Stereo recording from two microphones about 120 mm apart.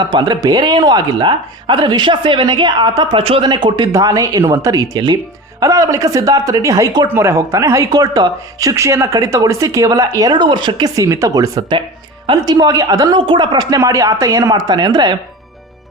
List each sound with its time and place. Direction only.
0.0 s speech: 40° right (ahead or behind)
3.9 s speech: 30° right (ahead or behind)